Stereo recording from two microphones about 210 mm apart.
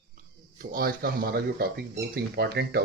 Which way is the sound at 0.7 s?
45° right (ahead or behind).